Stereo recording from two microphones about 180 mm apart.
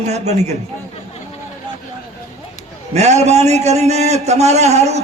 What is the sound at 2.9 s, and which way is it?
A man's voice, 40° right (ahead or behind).